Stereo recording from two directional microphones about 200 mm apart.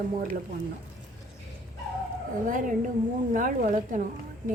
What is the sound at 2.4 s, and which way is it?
A woman's voice, 40° right (ahead or behind).